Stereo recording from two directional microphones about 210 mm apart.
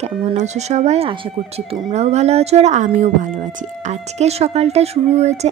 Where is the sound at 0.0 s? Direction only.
30° right (ahead or behind).